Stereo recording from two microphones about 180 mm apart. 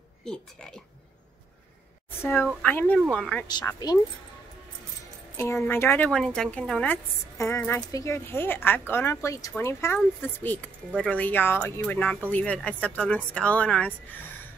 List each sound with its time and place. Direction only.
0.2 s speech: 5° left (ahead or behind)
2.2 s speech: 10° left (ahead or behind)
3.8 s speech: 20° left (ahead or behind)
5.4 s speech: 10° left (ahead or behind)